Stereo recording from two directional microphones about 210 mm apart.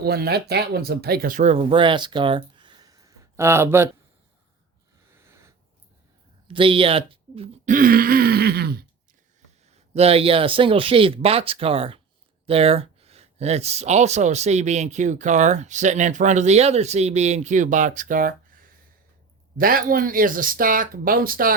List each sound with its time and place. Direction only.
0.0 s speech: 50° right (ahead or behind); by 3.8 s 10° right (ahead or behind)
5.2 s a sound: 10° right (ahead or behind)
6.5 s speech: 25° right (ahead or behind); by 8.7 s 50° right (ahead or behind)
9.9 s speech: 30° right (ahead or behind)